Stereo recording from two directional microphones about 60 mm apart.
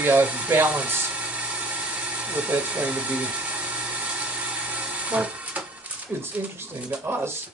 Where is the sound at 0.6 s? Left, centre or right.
Right.